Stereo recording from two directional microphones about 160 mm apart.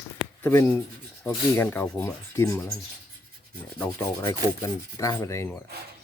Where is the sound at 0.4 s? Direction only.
15° left (ahead or behind).